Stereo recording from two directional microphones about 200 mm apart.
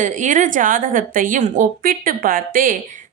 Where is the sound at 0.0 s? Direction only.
40° right (ahead or behind).